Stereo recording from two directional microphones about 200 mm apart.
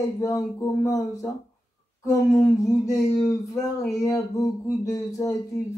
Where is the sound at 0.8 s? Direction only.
15° left (ahead or behind).